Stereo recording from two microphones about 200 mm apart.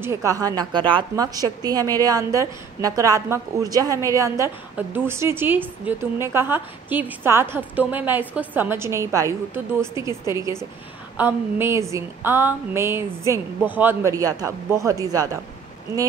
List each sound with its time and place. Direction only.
0.0 s a woman's voice: 15° right (ahead or behind)